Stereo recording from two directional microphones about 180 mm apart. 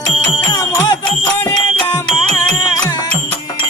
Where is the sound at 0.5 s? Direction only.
20° left (ahead or behind).